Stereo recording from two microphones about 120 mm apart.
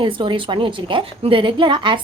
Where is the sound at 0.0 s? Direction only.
45° right (ahead or behind).